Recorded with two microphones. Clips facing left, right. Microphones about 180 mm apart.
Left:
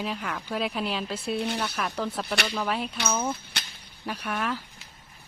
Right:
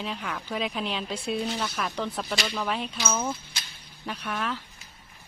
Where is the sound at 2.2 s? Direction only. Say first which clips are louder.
Left 1 dB; 65° left (ahead or behind).